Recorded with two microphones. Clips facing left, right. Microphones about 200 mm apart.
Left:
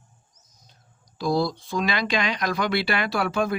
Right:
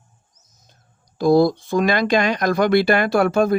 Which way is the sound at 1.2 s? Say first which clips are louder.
Right 9 dB; 50° right (ahead or behind).